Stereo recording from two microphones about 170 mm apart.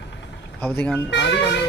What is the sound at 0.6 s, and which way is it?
Speech, 10° left (ahead or behind).